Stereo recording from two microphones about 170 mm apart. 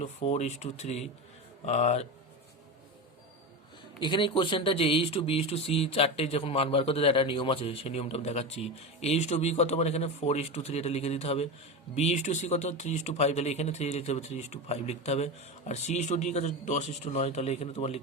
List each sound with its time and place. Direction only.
0.0 s speech: 40° left (ahead or behind)
4.0 s speech: 30° left (ahead or behind)